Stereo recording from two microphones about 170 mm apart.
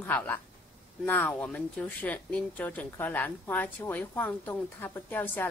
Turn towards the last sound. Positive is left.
turn(degrees=10)  # may be behind; listen again after turning